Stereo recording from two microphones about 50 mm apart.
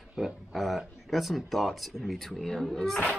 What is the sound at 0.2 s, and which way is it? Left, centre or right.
Speech, centre.